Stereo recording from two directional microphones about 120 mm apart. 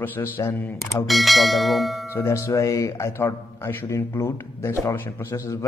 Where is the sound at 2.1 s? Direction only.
25° left (ahead or behind).